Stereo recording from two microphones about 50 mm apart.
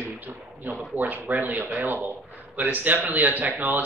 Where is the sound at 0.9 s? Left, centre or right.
Right.